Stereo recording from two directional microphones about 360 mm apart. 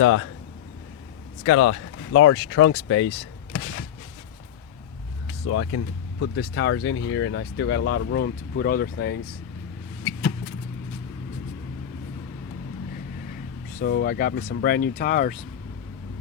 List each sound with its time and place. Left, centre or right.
0.0 s speech: left
1.5 s speech: left
5.5 s speech: left
13.7 s speech: left